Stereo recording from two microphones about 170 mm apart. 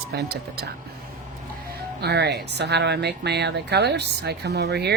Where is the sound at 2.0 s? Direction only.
75° right (ahead or behind).